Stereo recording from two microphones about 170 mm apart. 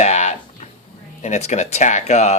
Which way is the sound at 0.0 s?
40° left (ahead or behind).